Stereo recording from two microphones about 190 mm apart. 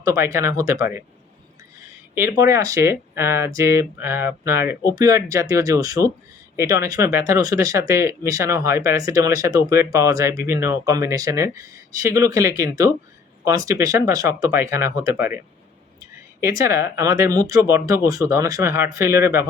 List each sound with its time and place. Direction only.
0.0 s speech: 15° right (ahead or behind)
2.1 s speech: 15° right (ahead or behind)
16.4 s speech: 15° right (ahead or behind)